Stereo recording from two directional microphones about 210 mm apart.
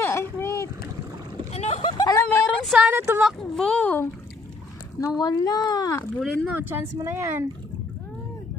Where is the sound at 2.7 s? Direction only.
5° right (ahead or behind).